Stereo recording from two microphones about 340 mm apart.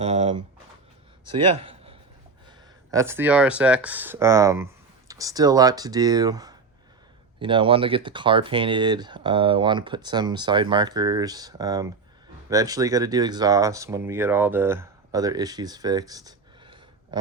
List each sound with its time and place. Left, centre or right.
0.0 s speech: centre
1.2 s a sound: centre
2.9 s speech: centre